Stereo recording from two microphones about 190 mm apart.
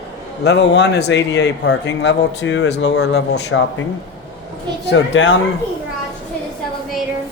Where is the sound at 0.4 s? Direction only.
65° left (ahead or behind).